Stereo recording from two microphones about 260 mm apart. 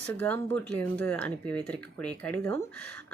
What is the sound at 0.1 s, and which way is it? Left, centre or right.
Speech, centre.